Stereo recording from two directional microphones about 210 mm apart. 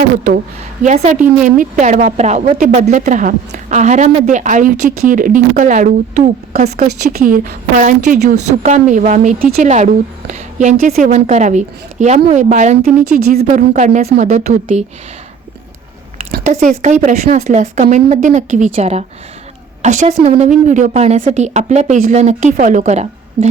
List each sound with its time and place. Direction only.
0.3 s a woman's voice: 40° right (ahead or behind)
16.6 s a woman's voice: 35° right (ahead or behind)